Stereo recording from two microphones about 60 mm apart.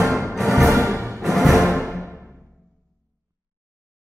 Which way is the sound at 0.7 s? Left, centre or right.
Right.